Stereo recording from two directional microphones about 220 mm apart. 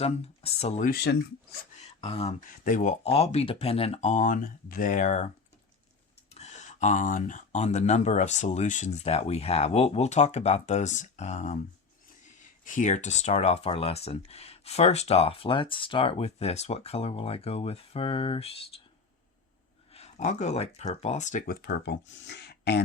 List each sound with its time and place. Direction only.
0.0 s speech: 25° left (ahead or behind)
0.9 s speech: 45° left (ahead or behind)
1.8 s a sound: 30° left (ahead or behind)
2.6 s speech: 35° left (ahead or behind)
6.3 s speech: 30° left (ahead or behind)
12.6 s speech: 35° left (ahead or behind)
19.9 s speech: 30° left (ahead or behind); by 22.8 s 50° left (ahead or behind)